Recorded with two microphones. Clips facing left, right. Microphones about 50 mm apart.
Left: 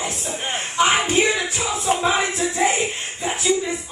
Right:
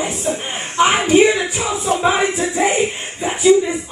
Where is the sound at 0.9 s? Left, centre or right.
Right.